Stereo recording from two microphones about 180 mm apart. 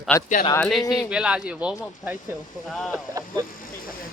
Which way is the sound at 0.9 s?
5° right (ahead or behind).